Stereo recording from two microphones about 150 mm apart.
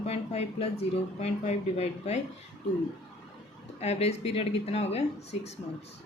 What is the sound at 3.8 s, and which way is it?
A woman's voice, 45° left (ahead or behind).